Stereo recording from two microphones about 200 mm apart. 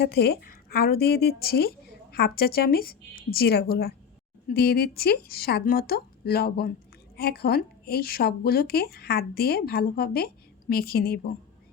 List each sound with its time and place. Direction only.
0.0 s speech: 50° left (ahead or behind)